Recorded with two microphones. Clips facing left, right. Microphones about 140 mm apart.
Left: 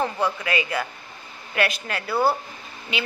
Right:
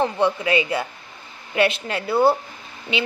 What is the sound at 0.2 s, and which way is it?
Speech, 25° right (ahead or behind).